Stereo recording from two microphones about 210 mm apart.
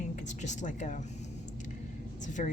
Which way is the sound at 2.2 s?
35° left (ahead or behind).